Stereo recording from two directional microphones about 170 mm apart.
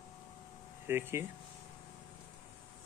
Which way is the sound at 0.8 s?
15° right (ahead or behind).